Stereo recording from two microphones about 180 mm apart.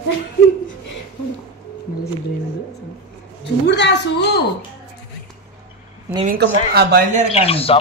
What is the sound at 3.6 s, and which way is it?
Speech, 70° left (ahead or behind).